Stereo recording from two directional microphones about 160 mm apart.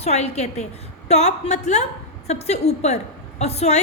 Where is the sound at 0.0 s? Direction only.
45° left (ahead or behind).